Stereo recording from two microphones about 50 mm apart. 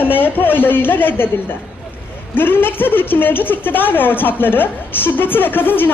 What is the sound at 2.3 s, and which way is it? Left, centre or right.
A woman's voice, left.